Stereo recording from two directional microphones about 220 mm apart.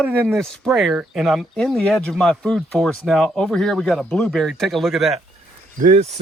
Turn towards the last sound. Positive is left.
turn(degrees=-30)  # may be behind; listen again after turning